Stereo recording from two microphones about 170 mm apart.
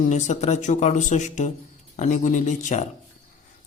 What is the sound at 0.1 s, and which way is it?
A man's voice, 45° left (ahead or behind).